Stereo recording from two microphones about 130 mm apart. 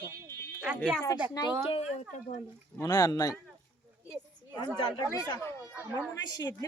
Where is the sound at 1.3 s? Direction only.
35° left (ahead or behind).